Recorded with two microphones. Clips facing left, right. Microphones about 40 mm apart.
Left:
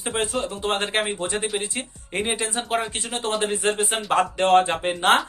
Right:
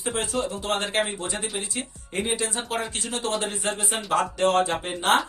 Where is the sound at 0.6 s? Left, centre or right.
Left.